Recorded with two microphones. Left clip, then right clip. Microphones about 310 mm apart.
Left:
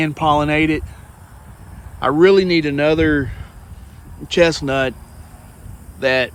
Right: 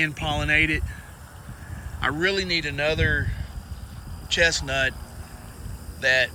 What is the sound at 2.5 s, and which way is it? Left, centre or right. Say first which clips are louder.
Speech: left 8 dB; centre.